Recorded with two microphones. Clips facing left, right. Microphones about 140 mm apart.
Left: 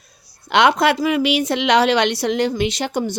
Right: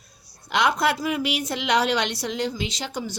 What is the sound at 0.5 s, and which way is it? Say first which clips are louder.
A woman's voice: left 7 dB; 90° left.